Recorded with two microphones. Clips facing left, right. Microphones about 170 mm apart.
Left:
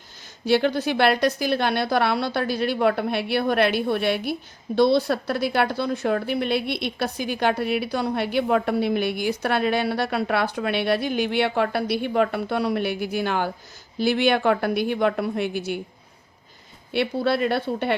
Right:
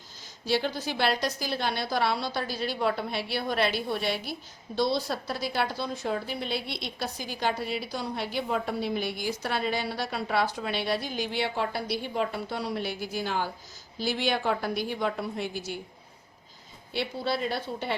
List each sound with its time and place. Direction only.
0.4 s a woman's voice: 60° left (ahead or behind)
16.9 s a woman's voice: 60° left (ahead or behind)